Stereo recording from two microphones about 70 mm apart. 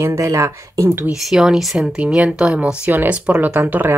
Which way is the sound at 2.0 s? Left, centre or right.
Centre.